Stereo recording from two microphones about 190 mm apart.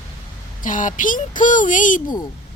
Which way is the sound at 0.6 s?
45° left (ahead or behind).